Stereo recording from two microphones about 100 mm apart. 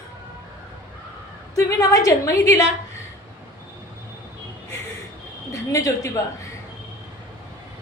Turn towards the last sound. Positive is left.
turn(degrees=30)  # may be behind; listen again after turning